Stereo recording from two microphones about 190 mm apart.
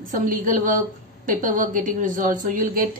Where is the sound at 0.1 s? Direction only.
45° right (ahead or behind).